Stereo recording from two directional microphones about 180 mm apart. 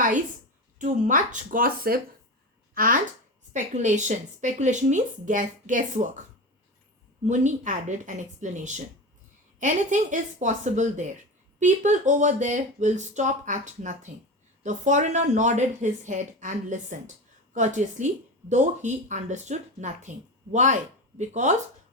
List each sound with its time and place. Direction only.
0.8 s speech: 45° right (ahead or behind)
7.3 s speech: 45° right (ahead or behind)